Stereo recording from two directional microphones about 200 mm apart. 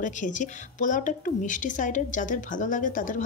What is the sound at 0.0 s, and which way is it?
A woman's voice, 40° left (ahead or behind).